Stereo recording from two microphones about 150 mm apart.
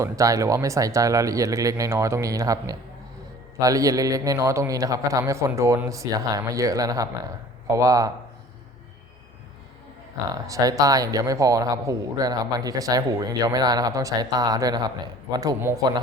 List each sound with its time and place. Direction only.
0.0 s speech: 20° right (ahead or behind)
10.4 s speech: 25° right (ahead or behind)